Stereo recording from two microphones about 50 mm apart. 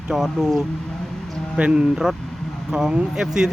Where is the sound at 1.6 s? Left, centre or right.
Right.